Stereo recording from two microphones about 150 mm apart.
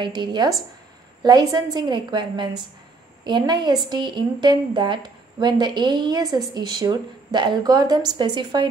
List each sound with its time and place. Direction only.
0.0 s a woman's voice: 30° right (ahead or behind)